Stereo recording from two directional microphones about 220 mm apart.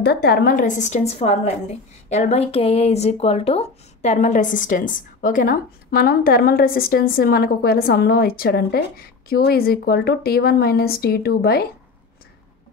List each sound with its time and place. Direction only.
0.0 s a woman's voice: 50° left (ahead or behind)